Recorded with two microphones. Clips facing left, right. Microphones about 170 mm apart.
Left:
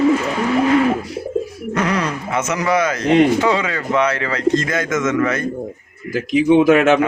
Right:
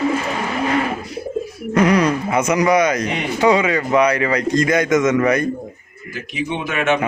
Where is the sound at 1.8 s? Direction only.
15° right (ahead or behind).